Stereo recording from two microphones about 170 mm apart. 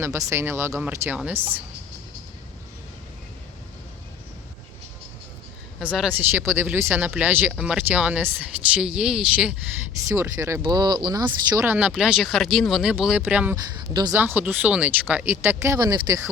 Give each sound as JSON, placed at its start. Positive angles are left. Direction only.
{"t": 0.0, "sound": "speech", "side_deg": -15}
{"t": 5.8, "sound": "speech", "side_deg": -5}
{"t": 10.1, "sound": "speech", "side_deg": -20}
{"t": 13.9, "sound": "speech", "side_deg": -25}
{"t": 14.2, "sound": "speech", "side_deg": -10}